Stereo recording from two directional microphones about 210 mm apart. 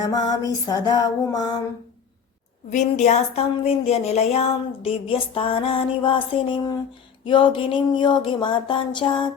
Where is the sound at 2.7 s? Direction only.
35° left (ahead or behind).